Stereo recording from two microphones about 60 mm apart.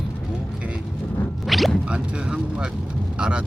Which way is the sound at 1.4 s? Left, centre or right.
Centre.